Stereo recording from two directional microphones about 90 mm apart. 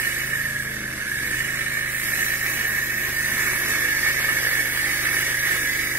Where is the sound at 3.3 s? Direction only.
20° right (ahead or behind).